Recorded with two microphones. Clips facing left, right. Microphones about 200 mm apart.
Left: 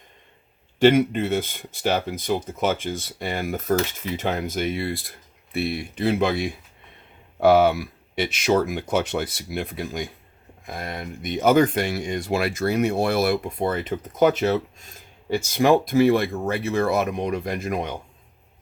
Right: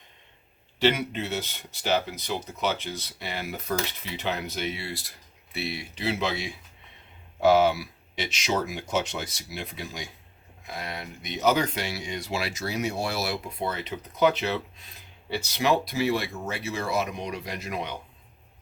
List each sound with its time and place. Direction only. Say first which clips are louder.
0.8 s speech: left 8 dB; 50° left (ahead or behind)